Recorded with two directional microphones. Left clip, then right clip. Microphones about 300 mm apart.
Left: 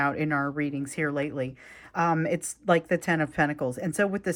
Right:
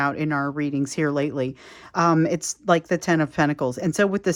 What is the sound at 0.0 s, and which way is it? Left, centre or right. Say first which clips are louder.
Speech: right 3 dB; centre.